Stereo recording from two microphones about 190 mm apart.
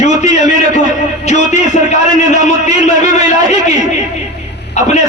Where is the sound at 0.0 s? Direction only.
35° left (ahead or behind).